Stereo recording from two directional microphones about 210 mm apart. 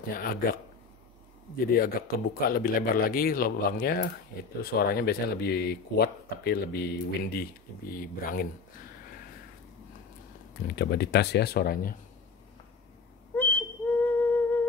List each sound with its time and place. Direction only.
0.1 s speech: 45° left (ahead or behind)
1.7 s speech: 45° left (ahead or behind)
10.8 s speech: 50° left (ahead or behind)
13.4 s whistle: 10° left (ahead or behind)